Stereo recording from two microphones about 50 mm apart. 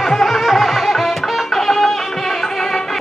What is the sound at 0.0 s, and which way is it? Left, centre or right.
Music, centre.